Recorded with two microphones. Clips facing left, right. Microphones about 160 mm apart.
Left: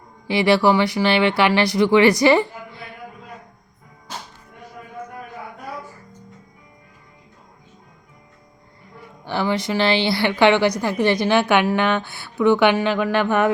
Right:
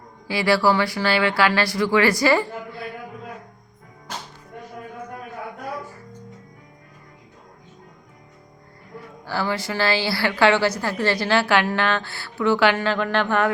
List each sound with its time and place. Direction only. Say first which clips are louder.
0.3 s a woman's voice: left 3 dB; 20° left (ahead or behind)
9.2 s a woman's voice: left 3 dB; 20° left (ahead or behind)